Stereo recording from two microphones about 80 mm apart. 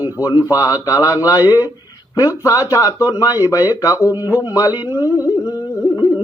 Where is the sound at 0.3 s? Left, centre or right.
Left.